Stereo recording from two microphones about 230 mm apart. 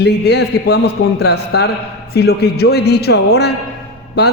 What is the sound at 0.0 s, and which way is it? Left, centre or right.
A man's voice, left.